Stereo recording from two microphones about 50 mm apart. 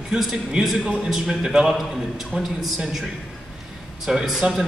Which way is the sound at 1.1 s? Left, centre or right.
Centre.